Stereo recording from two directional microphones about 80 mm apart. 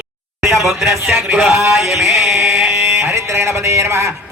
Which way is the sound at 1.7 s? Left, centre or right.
Centre.